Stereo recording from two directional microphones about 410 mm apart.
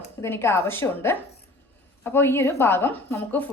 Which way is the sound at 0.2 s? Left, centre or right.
Centre.